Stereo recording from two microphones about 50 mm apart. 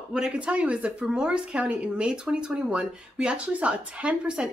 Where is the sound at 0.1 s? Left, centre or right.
Right.